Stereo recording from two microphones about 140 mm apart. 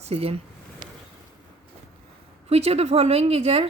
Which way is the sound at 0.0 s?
45° right (ahead or behind).